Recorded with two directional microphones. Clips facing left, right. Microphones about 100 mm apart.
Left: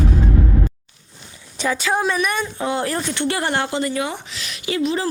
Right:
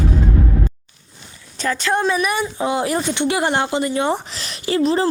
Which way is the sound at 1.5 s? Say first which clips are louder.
Right 1 dB; 10° left (ahead or behind).